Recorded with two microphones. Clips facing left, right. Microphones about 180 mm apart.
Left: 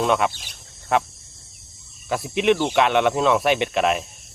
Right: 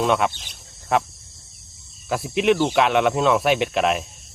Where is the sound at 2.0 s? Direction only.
Centre (ahead or behind).